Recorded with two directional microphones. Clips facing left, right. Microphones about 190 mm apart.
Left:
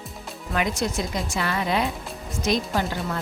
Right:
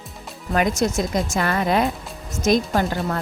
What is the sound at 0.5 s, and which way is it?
Speech, 45° right (ahead or behind).